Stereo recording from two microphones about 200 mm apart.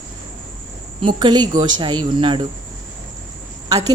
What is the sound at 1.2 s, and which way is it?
Speech, 20° right (ahead or behind).